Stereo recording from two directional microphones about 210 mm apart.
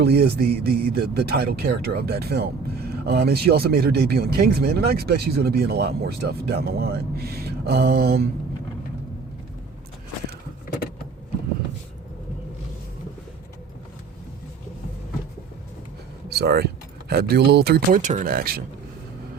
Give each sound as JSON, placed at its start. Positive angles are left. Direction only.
{"t": 0.0, "sound": "a man's voice", "side_deg": -50}
{"t": 16.3, "sound": "a man's voice", "side_deg": -50}